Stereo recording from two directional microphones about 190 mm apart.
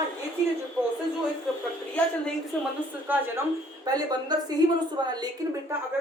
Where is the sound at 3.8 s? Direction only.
20° right (ahead or behind).